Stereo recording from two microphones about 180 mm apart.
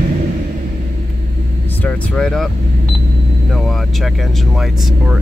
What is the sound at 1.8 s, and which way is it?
Speech, 5° left (ahead or behind).